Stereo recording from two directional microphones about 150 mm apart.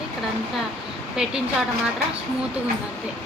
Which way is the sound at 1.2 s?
5° right (ahead or behind).